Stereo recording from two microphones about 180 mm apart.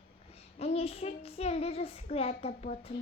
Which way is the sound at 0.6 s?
35° left (ahead or behind).